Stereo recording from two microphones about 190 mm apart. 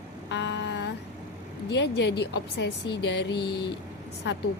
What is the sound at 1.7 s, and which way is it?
A woman's voice, 65° left (ahead or behind).